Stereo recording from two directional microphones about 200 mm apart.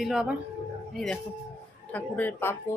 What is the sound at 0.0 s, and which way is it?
Speech, 5° right (ahead or behind).